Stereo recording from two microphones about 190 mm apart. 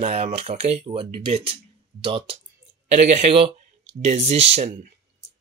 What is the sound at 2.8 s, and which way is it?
Speech, 40° right (ahead or behind).